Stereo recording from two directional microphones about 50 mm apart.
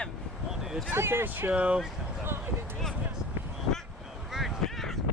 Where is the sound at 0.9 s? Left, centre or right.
Right.